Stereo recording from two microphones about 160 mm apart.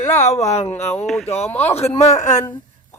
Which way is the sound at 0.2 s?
45° left (ahead or behind).